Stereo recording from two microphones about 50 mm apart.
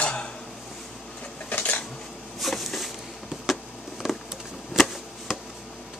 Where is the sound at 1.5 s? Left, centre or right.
Left.